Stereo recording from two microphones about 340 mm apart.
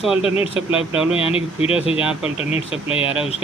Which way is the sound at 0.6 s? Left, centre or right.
Centre.